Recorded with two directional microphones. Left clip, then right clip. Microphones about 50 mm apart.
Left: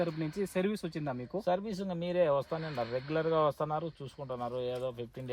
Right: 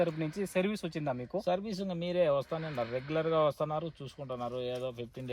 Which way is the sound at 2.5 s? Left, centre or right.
Left.